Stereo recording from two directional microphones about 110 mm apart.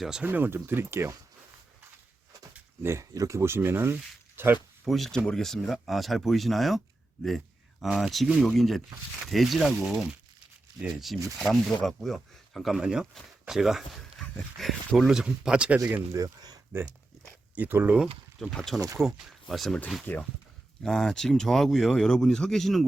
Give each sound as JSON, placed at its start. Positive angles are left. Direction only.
{"t": 0.0, "sound": "speech", "side_deg": -5}
{"t": 0.3, "sound": "speech", "side_deg": -20}
{"t": 2.5, "sound": "speech", "side_deg": -25}
{"t": 4.9, "sound": "speech", "side_deg": 0}
{"t": 16.1, "sound": "speech", "side_deg": -35}
{"t": 17.5, "sound": "speech", "side_deg": -15}
{"t": 18.5, "sound": "speech", "side_deg": 5}
{"t": 20.1, "sound": "speech", "side_deg": 20}
{"t": 20.8, "sound": "speech", "side_deg": 5}